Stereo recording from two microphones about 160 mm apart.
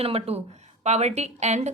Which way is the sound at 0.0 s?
40° right (ahead or behind).